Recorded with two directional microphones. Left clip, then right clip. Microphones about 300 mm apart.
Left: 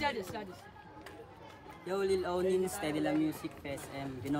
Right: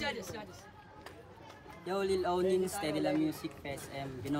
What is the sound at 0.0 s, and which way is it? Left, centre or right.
Chatter, left.